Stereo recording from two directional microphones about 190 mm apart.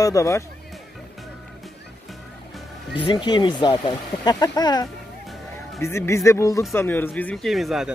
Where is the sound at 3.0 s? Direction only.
25° left (ahead or behind).